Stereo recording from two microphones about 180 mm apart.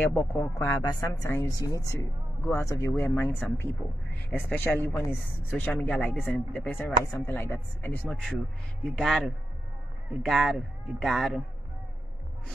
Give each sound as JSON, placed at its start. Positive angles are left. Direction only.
{"t": 0.1, "sound": "a man's voice", "side_deg": 15}